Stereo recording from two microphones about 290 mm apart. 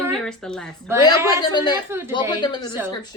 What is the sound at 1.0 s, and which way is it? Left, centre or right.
A woman's voice, centre.